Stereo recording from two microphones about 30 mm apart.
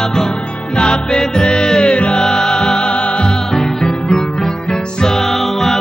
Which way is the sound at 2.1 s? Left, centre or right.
Left.